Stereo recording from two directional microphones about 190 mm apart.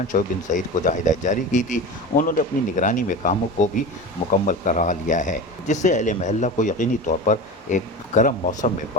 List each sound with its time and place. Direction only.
0.1 s speech: 40° left (ahead or behind)